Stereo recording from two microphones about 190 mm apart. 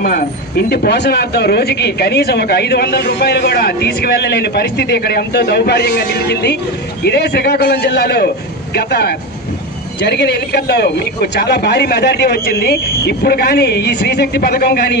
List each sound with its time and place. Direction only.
0.0 s speech: 55° left (ahead or behind)